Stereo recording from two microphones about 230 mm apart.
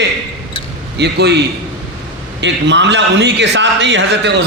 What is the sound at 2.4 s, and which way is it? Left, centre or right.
A man's voice, right.